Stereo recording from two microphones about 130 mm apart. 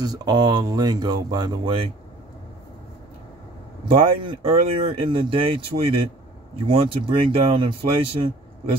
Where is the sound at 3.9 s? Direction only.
45° right (ahead or behind).